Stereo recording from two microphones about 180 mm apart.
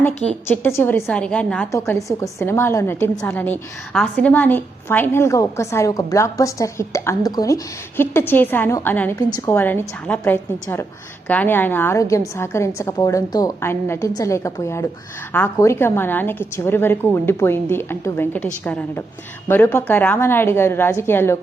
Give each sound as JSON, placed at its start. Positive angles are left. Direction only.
{"t": 0.3, "sound": "a woman's voice", "side_deg": 10}